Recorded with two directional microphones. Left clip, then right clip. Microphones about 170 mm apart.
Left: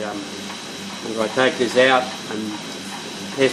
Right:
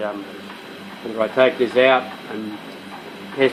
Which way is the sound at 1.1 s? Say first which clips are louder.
Right 2 dB; 30° right (ahead or behind).